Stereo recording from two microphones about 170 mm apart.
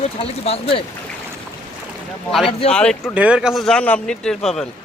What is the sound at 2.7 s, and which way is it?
Speech, 5° left (ahead or behind).